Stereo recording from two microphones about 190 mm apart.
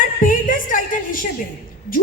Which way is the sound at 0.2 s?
45° left (ahead or behind).